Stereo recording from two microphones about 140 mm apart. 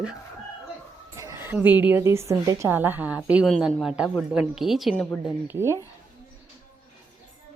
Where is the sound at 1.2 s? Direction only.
20° right (ahead or behind); by 5.0 s centre (ahead or behind).